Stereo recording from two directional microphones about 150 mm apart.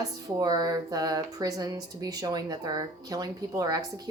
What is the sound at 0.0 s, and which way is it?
Speech, 25° right (ahead or behind).